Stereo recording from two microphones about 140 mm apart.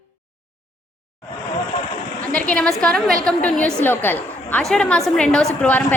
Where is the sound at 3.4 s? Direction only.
10° left (ahead or behind).